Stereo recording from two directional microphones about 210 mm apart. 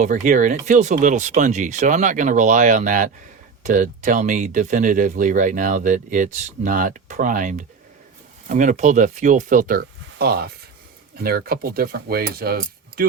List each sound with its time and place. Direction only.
0.0 s speech: 35° right (ahead or behind)
11.2 s cutlery: 45° right (ahead or behind)